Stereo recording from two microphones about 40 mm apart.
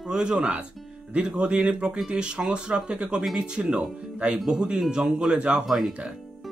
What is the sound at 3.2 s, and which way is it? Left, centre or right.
Speech, centre.